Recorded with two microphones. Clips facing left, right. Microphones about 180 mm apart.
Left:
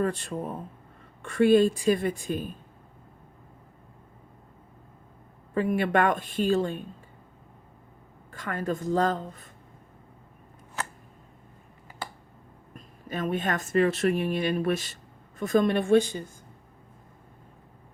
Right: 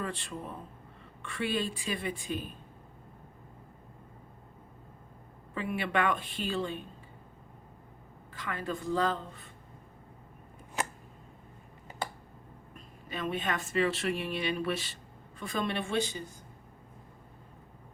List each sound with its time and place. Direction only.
0.0 s a woman's voice: 45° left (ahead or behind)
5.5 s a woman's voice: 45° left (ahead or behind)
8.3 s a woman's voice: 45° left (ahead or behind)
10.8 s a sound: 15° right (ahead or behind)
12.7 s a woman's voice: 45° left (ahead or behind)